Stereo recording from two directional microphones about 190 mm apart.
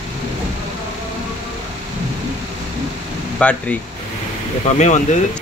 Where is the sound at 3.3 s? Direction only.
5° left (ahead or behind).